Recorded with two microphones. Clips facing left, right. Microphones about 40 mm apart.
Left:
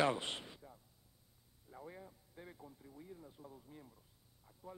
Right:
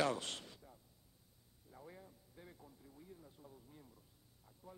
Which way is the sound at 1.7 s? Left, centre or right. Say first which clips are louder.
Left 4 dB; centre.